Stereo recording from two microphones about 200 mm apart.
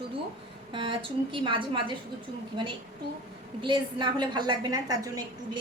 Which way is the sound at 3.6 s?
25° right (ahead or behind).